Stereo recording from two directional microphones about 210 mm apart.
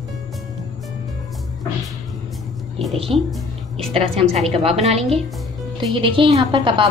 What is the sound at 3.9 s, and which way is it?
A woman's voice, 30° right (ahead or behind).